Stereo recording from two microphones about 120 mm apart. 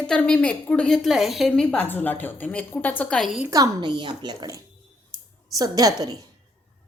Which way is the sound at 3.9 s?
40° right (ahead or behind).